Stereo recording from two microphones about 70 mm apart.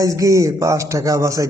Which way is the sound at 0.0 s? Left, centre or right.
Right.